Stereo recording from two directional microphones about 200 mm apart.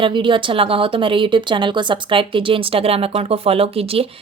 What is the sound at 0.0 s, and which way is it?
Speech, 25° right (ahead or behind).